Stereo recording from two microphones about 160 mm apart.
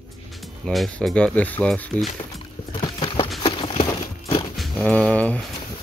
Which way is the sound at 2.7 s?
35° left (ahead or behind).